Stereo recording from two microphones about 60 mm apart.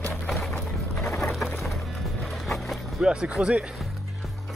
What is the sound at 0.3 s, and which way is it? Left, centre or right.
Music, centre.